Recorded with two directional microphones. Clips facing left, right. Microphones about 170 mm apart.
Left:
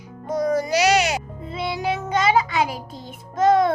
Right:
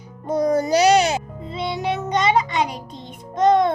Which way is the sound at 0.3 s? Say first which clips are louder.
Right 3 dB; 30° right (ahead or behind).